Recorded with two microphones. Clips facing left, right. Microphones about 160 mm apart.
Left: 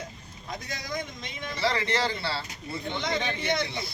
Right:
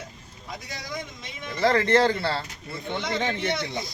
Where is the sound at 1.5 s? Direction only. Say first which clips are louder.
Right 7 dB; 55° right (ahead or behind).